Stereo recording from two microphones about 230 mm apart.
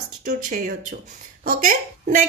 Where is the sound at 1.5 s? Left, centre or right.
Right.